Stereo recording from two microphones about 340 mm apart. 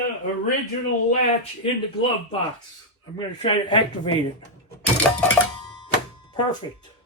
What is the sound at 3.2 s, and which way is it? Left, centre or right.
Speech, centre.